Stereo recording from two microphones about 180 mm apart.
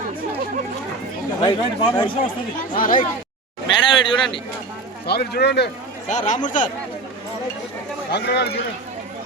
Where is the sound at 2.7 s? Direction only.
50° left (ahead or behind).